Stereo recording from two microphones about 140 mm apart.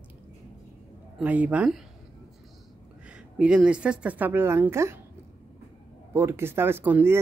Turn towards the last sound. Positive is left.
turn(degrees=-15)  # may be behind; listen again after turning